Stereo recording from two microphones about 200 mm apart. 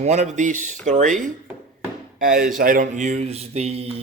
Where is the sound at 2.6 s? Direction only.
45° right (ahead or behind).